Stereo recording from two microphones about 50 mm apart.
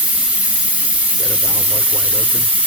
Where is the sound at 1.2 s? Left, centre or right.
Centre.